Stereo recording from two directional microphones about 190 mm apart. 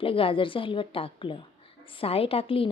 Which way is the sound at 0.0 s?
30° left (ahead or behind).